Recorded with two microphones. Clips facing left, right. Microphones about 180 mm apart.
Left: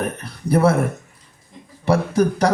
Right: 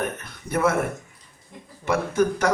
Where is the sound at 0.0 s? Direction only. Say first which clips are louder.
Left 4 dB; 35° left (ahead or behind).